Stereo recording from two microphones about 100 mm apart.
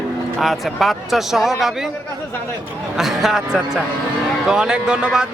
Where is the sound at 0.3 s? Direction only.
Centre (ahead or behind).